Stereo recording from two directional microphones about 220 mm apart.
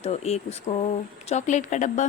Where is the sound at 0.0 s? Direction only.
30° left (ahead or behind).